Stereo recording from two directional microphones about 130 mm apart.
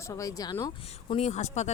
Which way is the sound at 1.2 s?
60° left (ahead or behind).